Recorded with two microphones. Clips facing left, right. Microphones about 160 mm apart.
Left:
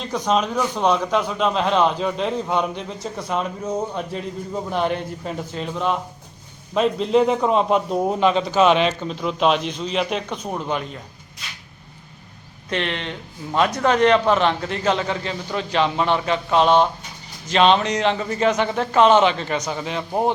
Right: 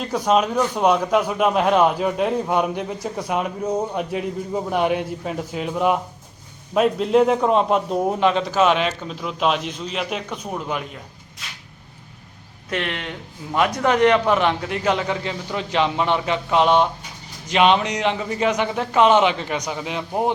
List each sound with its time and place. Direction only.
0.0 s a man's voice: 5° right (ahead or behind)
12.7 s a man's voice: 10° right (ahead or behind)